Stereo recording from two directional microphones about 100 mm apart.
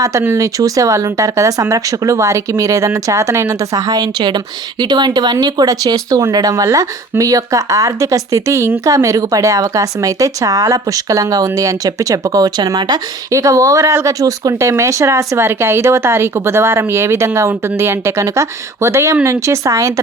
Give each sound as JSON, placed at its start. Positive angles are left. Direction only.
{"t": 0.0, "sound": "a woman's voice", "side_deg": -30}